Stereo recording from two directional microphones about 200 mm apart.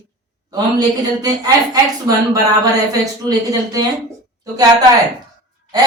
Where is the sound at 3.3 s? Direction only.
20° right (ahead or behind).